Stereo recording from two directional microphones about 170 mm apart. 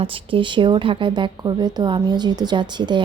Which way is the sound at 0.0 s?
30° right (ahead or behind).